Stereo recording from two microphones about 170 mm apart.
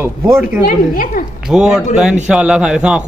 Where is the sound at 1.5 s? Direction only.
5° right (ahead or behind).